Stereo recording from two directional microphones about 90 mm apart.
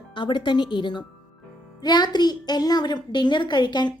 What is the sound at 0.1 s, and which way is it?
Speech, 60° left (ahead or behind).